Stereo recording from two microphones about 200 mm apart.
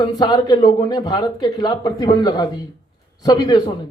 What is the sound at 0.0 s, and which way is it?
Speech, 20° left (ahead or behind).